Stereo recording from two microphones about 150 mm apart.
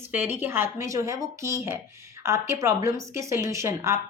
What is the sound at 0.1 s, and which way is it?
A woman's voice, 15° right (ahead or behind).